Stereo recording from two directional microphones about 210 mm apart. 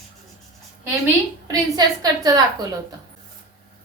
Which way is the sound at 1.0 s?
15° right (ahead or behind).